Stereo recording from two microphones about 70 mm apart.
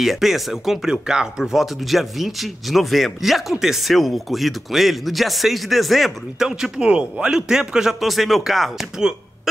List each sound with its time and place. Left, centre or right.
0.0 s speech: centre